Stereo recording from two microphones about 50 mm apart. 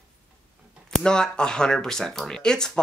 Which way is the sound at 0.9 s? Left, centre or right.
Centre.